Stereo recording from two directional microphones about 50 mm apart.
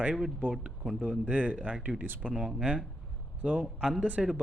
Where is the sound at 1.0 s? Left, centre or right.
Right.